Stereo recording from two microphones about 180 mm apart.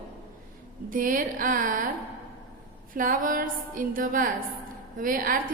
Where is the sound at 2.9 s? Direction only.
50° right (ahead or behind).